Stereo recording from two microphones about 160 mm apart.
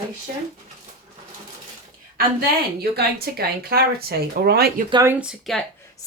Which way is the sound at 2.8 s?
75° right (ahead or behind).